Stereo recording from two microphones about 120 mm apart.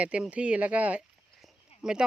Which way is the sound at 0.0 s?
10° right (ahead or behind).